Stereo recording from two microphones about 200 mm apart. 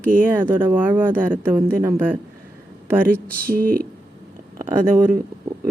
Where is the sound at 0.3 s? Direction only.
10° right (ahead or behind).